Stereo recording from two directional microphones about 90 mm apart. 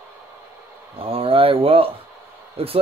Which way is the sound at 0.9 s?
90° right.